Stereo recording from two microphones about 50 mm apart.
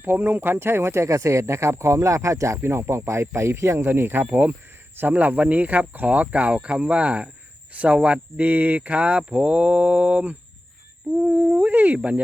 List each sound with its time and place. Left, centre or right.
0.0 s speech: right
2.6 s speech: right
3.8 s speech: right
7.7 s a sound: right
7.9 s speech: right
11.6 s speech: right